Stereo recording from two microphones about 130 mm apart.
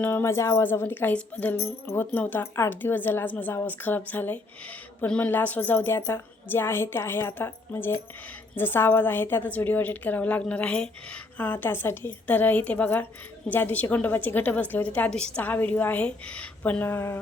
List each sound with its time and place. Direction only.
0.0 s a woman's voice: 20° left (ahead or behind)